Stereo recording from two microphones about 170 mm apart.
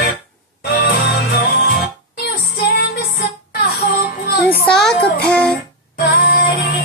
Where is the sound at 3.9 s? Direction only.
65° left (ahead or behind).